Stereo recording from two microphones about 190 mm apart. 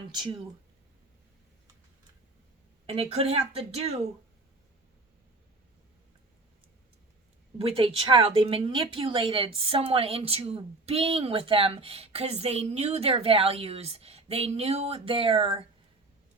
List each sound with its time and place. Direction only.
0.1 s a woman's voice: 20° right (ahead or behind)
2.8 s a woman's voice: 30° right (ahead or behind)
7.6 s a woman's voice: 30° right (ahead or behind)